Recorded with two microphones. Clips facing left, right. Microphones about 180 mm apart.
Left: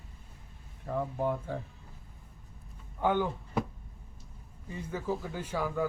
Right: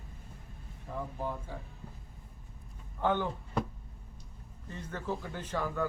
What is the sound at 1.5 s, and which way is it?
Speech, 55° left (ahead or behind).